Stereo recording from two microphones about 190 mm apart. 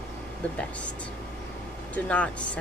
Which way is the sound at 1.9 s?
5° left (ahead or behind).